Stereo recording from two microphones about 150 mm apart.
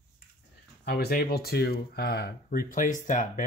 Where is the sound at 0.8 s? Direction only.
90° left.